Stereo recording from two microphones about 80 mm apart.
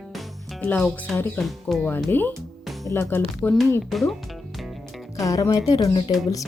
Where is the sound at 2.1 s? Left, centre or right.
Left.